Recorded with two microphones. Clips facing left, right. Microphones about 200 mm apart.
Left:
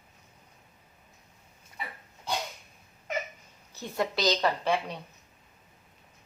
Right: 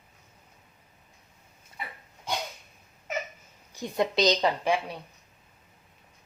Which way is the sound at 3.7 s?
15° right (ahead or behind).